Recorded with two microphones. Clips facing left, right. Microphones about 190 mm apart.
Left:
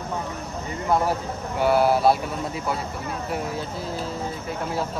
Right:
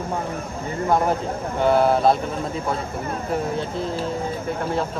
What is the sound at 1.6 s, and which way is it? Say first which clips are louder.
Speech: right 1 dB; 5° left (ahead or behind).